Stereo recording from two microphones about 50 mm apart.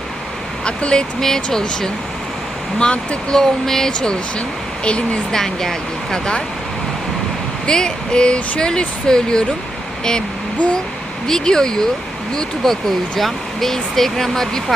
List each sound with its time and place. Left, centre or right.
0.6 s speech: centre
2.7 s speech: left
3.3 s speech: centre
5.3 s speech: centre
7.7 s speech: centre
11.3 s speech: centre